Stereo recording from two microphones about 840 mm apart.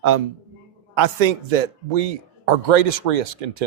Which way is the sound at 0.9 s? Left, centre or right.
Right.